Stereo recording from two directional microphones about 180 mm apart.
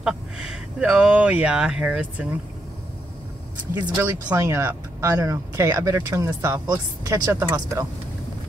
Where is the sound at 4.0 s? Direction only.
15° right (ahead or behind).